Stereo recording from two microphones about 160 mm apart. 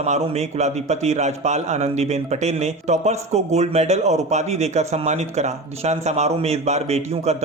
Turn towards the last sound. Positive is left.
turn(degrees=-45)  # may be behind; listen again after turning